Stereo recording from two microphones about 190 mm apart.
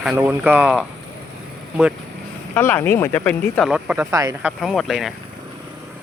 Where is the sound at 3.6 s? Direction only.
5° right (ahead or behind).